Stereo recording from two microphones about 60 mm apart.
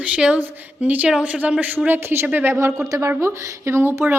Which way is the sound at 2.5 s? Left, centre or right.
Right.